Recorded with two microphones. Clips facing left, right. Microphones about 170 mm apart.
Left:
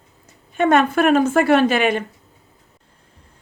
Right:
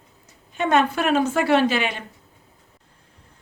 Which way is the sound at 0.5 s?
50° left (ahead or behind).